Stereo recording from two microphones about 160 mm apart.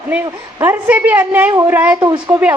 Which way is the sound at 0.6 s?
10° right (ahead or behind).